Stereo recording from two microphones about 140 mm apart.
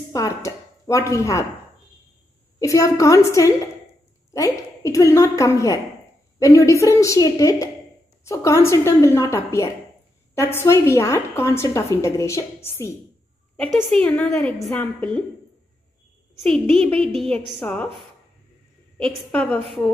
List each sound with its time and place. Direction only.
0.1 s speech: 20° left (ahead or behind)
2.6 s a woman's voice: 20° left (ahead or behind)
13.7 s a woman's voice: 5° left (ahead or behind)
16.3 s a woman's voice: 5° left (ahead or behind)
18.9 s a woman's voice: 5° left (ahead or behind)